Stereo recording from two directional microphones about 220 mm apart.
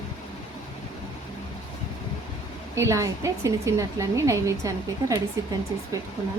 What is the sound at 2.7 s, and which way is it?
A woman's voice, 15° right (ahead or behind).